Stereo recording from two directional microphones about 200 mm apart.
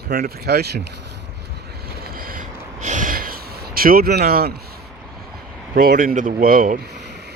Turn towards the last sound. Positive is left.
turn(degrees=-55)  # may be behind; listen again after turning